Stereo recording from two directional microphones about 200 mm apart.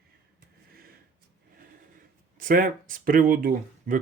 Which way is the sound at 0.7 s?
50° right (ahead or behind).